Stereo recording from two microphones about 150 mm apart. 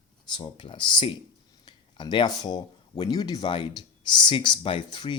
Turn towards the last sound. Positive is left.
turn(degrees=30)  # may be behind; listen again after turning